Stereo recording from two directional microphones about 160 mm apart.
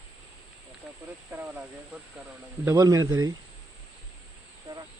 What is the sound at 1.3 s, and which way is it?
Speech, 10° right (ahead or behind).